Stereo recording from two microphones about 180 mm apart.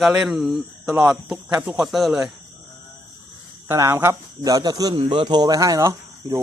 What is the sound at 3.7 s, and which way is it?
Speech, 15° right (ahead or behind).